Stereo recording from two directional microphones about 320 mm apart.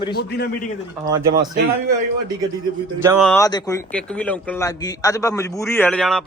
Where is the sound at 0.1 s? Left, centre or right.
Left.